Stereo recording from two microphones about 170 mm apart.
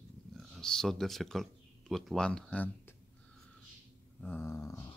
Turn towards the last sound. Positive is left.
turn(degrees=15)  # may be behind; listen again after turning